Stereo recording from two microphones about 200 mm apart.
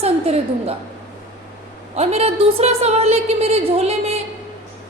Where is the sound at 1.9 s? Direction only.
30° right (ahead or behind).